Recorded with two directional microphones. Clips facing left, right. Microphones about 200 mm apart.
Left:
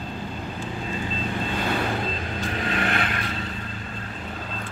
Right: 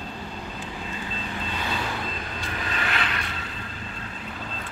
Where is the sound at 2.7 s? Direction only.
55° left (ahead or behind).